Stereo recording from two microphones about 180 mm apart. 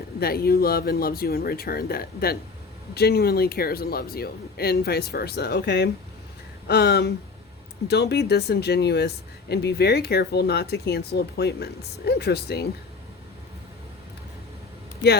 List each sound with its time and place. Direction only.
0.2 s speech: 60° left (ahead or behind)